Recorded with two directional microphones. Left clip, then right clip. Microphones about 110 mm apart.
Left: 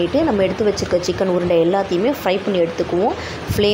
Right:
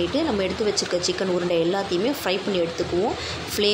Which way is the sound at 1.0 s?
15° left (ahead or behind).